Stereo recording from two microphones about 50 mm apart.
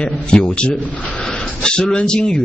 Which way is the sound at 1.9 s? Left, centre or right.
Centre.